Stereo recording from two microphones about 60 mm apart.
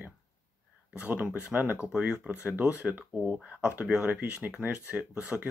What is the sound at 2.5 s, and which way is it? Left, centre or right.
Speech, right.